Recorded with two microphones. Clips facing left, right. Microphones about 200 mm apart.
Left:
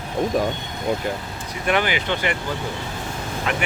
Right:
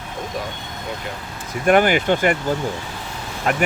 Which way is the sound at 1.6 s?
45° right (ahead or behind).